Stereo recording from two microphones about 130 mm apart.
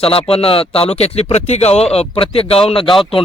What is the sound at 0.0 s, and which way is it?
Speech, 45° left (ahead or behind).